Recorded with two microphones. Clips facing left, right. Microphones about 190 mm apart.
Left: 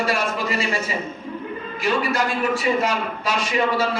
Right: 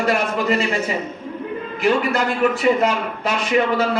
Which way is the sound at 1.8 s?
55° right (ahead or behind).